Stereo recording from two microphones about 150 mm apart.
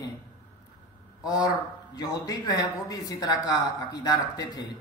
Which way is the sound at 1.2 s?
25° left (ahead or behind).